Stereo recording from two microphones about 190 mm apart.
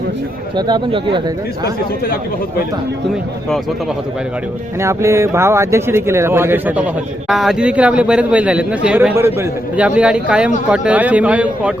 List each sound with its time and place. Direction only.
0.5 s speech: 25° right (ahead or behind)
4.8 s speech: 15° right (ahead or behind)